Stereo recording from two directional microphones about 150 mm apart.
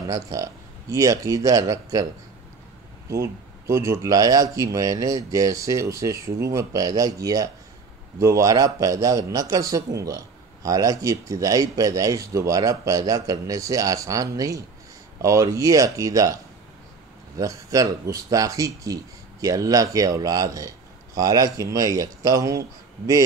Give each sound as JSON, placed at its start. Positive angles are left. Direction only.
{"t": 0.1, "sound": "speech", "side_deg": -20}
{"t": 3.1, "sound": "speech", "side_deg": -20}
{"t": 17.4, "sound": "speech", "side_deg": -20}